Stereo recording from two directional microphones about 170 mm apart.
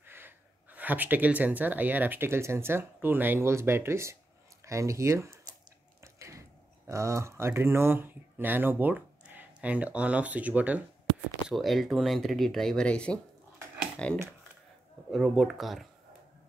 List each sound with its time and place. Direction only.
0.1 s speech: 10° right (ahead or behind)
6.9 s speech: 15° right (ahead or behind); by 15.9 s centre (ahead or behind)